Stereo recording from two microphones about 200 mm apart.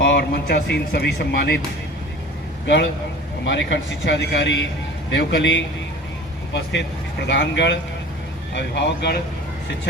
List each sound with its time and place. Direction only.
0.0 s speech: 55° left (ahead or behind)
2.6 s speech: 60° left (ahead or behind)
7.3 s speech: 65° left (ahead or behind)